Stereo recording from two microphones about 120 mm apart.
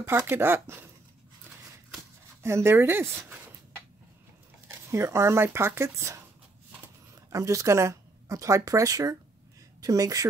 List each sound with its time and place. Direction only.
0.0 s speech: 20° right (ahead or behind)
2.4 s speech: 20° right (ahead or behind)
4.8 s speech: 25° right (ahead or behind)